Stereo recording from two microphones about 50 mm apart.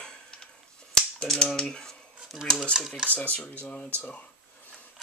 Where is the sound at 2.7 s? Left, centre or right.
Centre.